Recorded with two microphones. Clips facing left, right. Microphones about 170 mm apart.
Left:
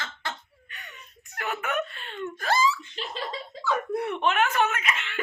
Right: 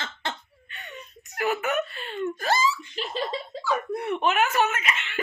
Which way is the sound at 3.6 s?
5° right (ahead or behind).